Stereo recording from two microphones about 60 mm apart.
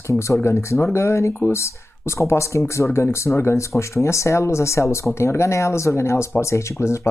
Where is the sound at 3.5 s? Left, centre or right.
Left.